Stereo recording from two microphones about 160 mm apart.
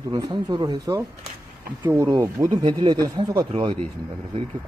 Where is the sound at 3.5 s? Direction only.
40° right (ahead or behind).